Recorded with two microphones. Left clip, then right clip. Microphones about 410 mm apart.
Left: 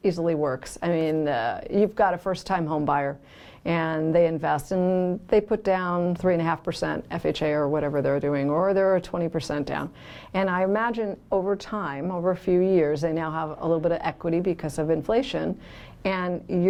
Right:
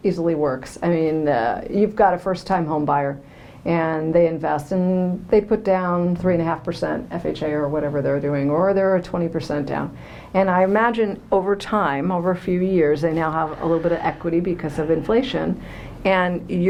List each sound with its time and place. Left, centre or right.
0.0 s speech: left